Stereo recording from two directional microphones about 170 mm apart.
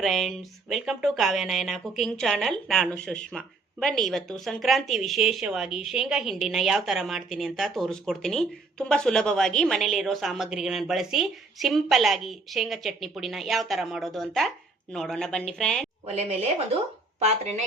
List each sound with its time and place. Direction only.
0.0 s a woman's voice: centre (ahead or behind)
16.0 s speech: 40° right (ahead or behind)